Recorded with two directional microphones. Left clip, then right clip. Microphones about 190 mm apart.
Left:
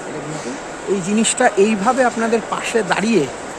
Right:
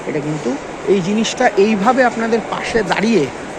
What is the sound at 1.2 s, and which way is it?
Speech, 15° left (ahead or behind).